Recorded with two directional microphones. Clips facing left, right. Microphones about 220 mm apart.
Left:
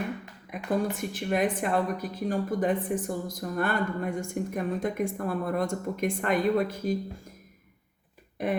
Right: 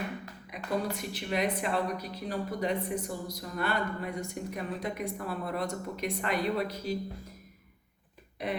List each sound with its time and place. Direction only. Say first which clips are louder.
0.5 s a woman's voice: left 4 dB; 50° left (ahead or behind)